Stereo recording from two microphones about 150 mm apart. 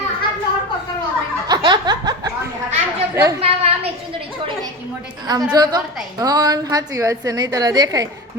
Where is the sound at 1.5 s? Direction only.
30° right (ahead or behind).